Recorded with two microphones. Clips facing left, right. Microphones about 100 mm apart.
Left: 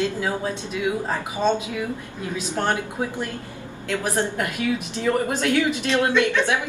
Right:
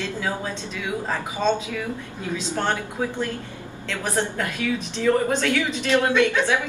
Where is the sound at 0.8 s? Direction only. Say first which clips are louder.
Left 3 dB; 20° left (ahead or behind).